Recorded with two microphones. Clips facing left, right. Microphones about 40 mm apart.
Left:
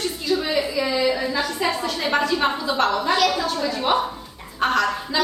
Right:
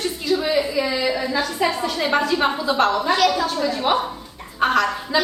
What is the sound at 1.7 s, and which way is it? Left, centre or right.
A woman's voice, centre.